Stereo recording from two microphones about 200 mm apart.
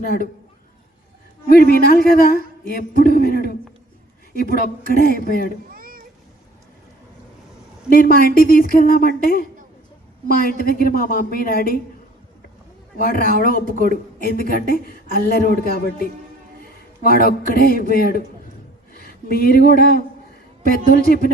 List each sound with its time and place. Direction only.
0.0 s a woman's voice: 50° left (ahead or behind)
1.5 s a woman's voice: 50° left (ahead or behind)
4.9 s a woman's voice: 45° left (ahead or behind)
5.7 s a sound: 45° right (ahead or behind)
8.1 s a woman's voice: 45° left (ahead or behind)
13.0 s a woman's voice: 45° left (ahead or behind)